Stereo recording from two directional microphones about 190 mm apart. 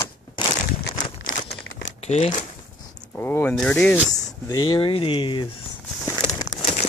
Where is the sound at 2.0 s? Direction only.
35° left (ahead or behind).